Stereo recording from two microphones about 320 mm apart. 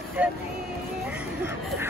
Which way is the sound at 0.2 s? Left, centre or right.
Centre.